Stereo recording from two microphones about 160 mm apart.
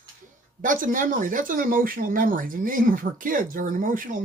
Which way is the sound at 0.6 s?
55° right (ahead or behind).